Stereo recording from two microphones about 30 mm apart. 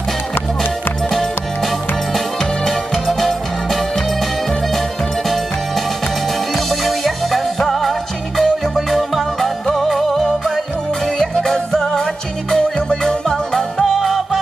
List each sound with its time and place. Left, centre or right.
2.1 s music: centre
6.5 s music: centre
11.1 s music: centre
13.7 s music: centre